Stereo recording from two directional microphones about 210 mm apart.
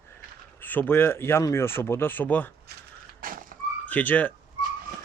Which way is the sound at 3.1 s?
40° right (ahead or behind).